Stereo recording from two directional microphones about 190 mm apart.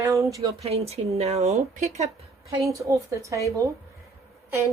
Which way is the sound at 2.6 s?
15° right (ahead or behind).